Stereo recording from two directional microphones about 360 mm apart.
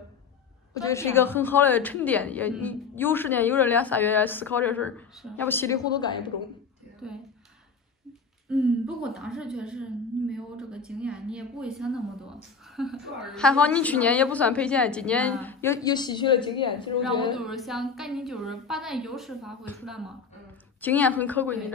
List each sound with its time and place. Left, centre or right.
0.7 s a woman's voice: centre
7.0 s a woman's voice: centre
8.5 s a woman's voice: centre
17.4 s a woman's voice: centre